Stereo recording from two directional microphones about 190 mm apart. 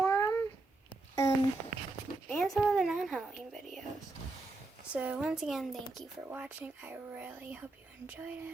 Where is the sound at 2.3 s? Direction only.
Centre (ahead or behind).